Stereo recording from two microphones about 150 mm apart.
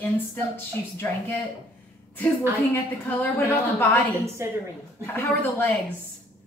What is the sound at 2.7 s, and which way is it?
A woman's voice, 10° left (ahead or behind).